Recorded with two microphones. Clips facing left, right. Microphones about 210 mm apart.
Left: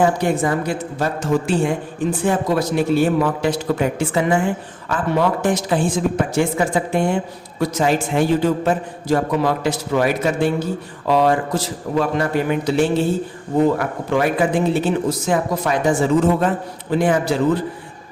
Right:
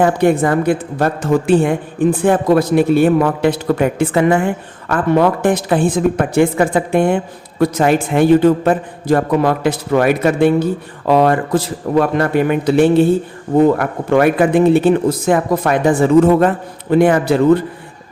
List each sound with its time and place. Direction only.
0.0 s a woman's voice: 60° right (ahead or behind)